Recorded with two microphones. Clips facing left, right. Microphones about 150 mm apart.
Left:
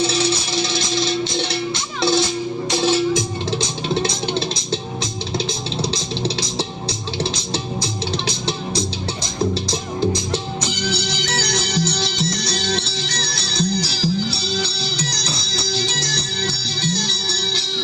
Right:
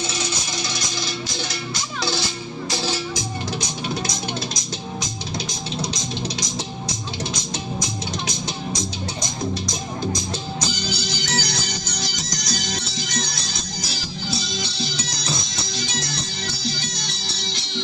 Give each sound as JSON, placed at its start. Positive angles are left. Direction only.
{"t": 0.0, "sound": "music", "side_deg": 30}
{"t": 9.2, "sound": "music", "side_deg": 30}
{"t": 10.8, "sound": "music", "side_deg": 65}
{"t": 11.8, "sound": "music", "side_deg": 30}